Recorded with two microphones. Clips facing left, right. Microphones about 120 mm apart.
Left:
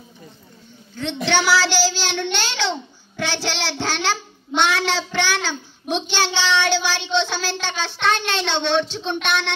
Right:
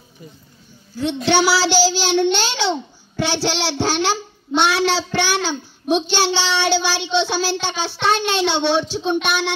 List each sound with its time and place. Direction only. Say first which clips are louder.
0.9 s a child's voice: right 4 dB; 10° right (ahead or behind)